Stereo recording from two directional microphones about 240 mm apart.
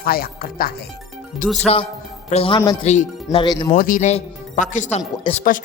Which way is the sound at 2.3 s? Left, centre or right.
Left.